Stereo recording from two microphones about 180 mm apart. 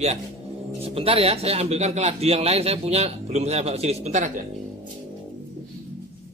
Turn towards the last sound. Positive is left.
turn(degrees=-45)  # may be behind; listen again after turning